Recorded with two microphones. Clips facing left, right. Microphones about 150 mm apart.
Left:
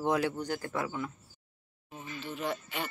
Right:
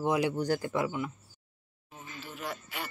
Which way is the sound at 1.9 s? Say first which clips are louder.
Left 4 dB; 5° right (ahead or behind).